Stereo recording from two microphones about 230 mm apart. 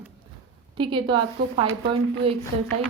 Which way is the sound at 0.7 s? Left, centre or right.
Right.